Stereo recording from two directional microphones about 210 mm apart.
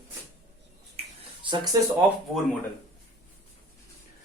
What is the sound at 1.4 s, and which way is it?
Speech, 25° right (ahead or behind).